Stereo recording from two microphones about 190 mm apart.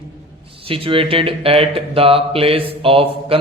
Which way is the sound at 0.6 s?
30° right (ahead or behind).